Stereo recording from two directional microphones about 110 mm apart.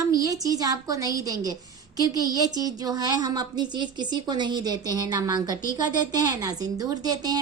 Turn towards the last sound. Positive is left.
turn(degrees=-35)  # may be behind; listen again after turning